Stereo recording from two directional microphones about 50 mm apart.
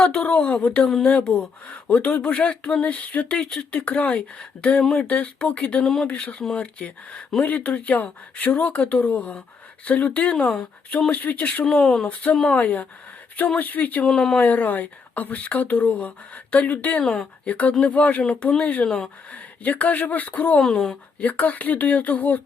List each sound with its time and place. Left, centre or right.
0.0 s speech: left
5.8 s speech: centre
6.1 s speech: left
11.6 s speech: centre
12.0 s speech: left
14.0 s speech: centre
14.3 s speech: left
17.0 s speech: centre
17.4 s speech: left
18.9 s speech: centre
19.3 s speech: left
20.6 s speech: centre
21.2 s speech: left